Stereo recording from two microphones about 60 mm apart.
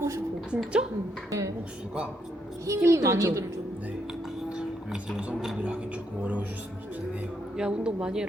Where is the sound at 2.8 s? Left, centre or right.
Right.